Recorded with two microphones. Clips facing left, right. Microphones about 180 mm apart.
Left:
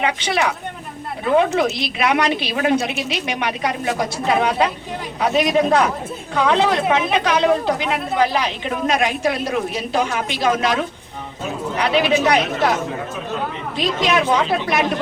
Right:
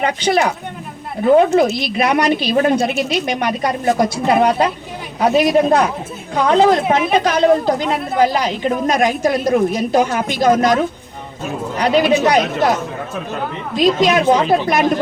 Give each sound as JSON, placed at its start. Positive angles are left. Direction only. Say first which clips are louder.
{"t": 0.0, "sound": "speech", "louder": "right 4 dB", "side_deg": -40}
{"t": 13.7, "sound": "a woman's voice", "louder": "right 6 dB", "side_deg": -45}